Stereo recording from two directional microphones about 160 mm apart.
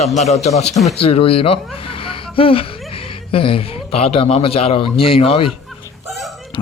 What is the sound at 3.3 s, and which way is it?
A man's voice, 35° left (ahead or behind).